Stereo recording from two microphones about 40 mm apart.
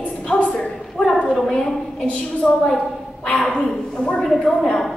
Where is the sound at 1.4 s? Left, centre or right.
Centre.